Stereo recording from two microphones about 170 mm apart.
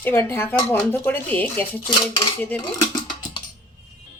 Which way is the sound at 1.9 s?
25° left (ahead or behind).